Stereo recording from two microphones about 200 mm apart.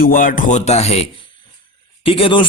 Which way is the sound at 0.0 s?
45° left (ahead or behind).